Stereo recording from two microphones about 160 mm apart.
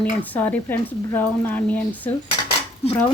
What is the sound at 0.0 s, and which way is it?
Speech, 10° left (ahead or behind).